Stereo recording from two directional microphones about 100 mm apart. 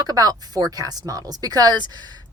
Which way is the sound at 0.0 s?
40° right (ahead or behind).